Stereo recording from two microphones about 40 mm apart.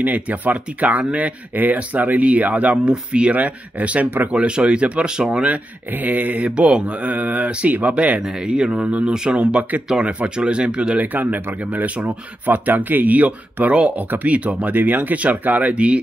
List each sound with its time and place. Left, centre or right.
0.0 s speech: right
4.3 s speech: right
6.0 s speech: right
6.5 s speech: right
7.1 s speech: right
10.0 s speech: right
11.0 s speech: right
15.7 s speech: right